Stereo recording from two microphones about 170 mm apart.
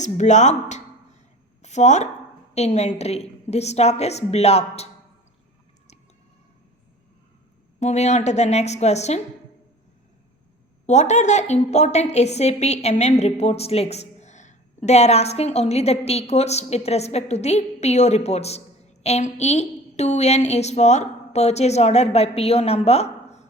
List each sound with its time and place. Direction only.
0.0 s a woman's voice: 45° left (ahead or behind)
7.8 s a woman's voice: 40° left (ahead or behind)
10.8 s a woman's voice: 40° left (ahead or behind)